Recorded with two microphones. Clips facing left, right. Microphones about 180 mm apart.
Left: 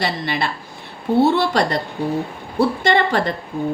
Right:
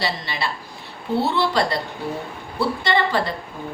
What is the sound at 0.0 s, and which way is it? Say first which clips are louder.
Speech: left 4 dB; 50° left (ahead or behind).